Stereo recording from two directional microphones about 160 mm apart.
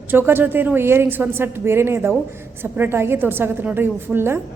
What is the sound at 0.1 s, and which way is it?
Speech, 15° right (ahead or behind).